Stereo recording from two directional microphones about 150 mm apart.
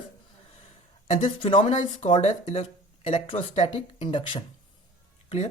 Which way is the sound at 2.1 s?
45° left (ahead or behind).